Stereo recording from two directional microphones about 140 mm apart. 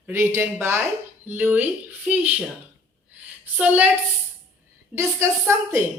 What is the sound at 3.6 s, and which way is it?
Speech, 10° right (ahead or behind).